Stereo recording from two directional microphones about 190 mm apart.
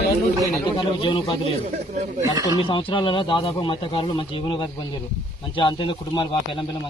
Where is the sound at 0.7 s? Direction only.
25° left (ahead or behind).